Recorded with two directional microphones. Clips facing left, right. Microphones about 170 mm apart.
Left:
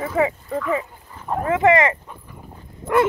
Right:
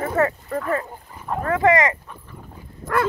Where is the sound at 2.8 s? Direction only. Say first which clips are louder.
Left 4 dB; 25° left (ahead or behind).